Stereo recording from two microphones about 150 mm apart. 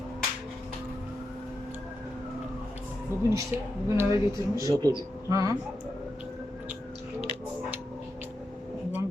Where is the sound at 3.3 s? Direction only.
15° right (ahead or behind).